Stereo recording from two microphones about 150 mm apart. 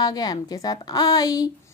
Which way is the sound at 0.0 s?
25° left (ahead or behind).